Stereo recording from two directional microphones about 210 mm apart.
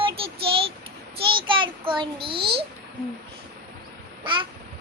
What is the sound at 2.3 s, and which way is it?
Speech, 50° right (ahead or behind).